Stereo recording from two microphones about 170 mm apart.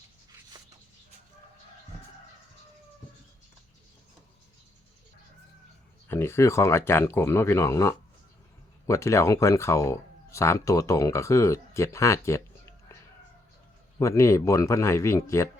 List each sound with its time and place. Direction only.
6.1 s speech: 15° left (ahead or behind)
14.0 s speech: 15° left (ahead or behind)